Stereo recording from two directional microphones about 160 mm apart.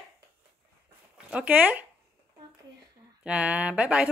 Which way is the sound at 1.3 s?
10° right (ahead or behind).